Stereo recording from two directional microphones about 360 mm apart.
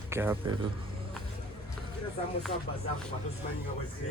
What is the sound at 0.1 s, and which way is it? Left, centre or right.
Speech, centre.